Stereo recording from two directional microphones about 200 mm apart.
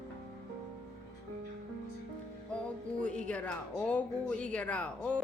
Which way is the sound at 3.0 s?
5° left (ahead or behind).